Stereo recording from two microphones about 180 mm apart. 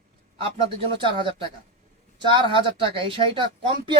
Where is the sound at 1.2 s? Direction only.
30° right (ahead or behind).